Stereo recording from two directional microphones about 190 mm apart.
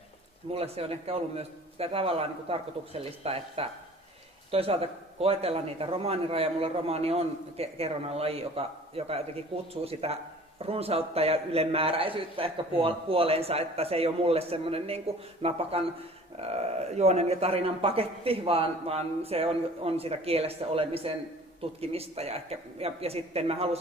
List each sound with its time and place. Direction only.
0.5 s speech: 30° right (ahead or behind)